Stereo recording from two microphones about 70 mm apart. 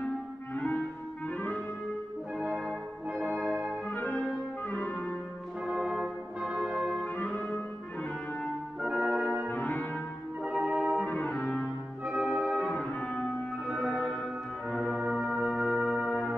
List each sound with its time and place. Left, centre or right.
3.1 s music: centre
4.2 s brass instrument: left
5.7 s brass instrument: centre
7.2 s music: left
8.8 s brass instrument: centre
9.5 s brass instrument: left
10.6 s organ: centre
11.1 s brass instrument: centre
12.1 s music: centre
12.7 s music: centre
13.7 s music: centre
15.0 s brass instrument: centre